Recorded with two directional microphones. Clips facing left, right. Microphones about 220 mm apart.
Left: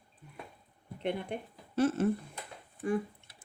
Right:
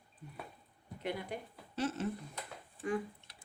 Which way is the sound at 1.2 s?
55° left (ahead or behind).